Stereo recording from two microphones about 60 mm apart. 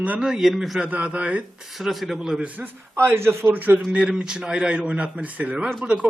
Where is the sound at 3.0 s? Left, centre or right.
Right.